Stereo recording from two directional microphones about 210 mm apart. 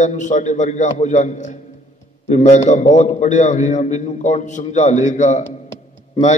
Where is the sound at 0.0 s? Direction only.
35° left (ahead or behind).